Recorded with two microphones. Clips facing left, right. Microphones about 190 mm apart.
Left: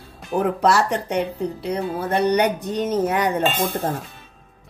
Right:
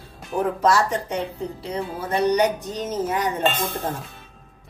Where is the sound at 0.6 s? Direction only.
65° left (ahead or behind).